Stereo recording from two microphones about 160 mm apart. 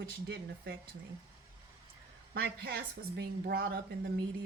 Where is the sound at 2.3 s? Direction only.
85° right.